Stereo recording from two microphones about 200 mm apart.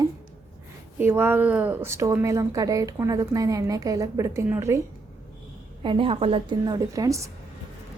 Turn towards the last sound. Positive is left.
turn(degrees=-15)  # may be behind; listen again after turning